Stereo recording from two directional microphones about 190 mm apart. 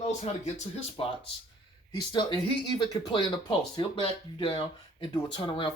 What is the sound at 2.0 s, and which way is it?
Speech, 25° left (ahead or behind).